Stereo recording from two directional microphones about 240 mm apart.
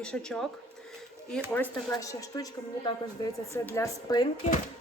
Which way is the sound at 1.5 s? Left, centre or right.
Centre.